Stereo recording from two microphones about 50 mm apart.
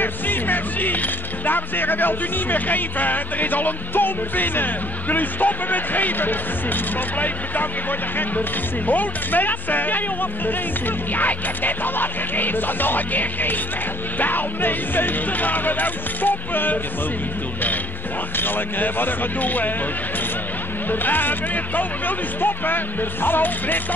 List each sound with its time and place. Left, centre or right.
0.0 s speech: left
18.3 s speech: left
20.9 s speech: left